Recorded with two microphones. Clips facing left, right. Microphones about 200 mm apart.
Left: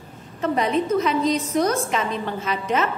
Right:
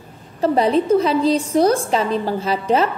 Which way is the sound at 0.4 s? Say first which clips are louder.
Right 5 dB; 30° right (ahead or behind).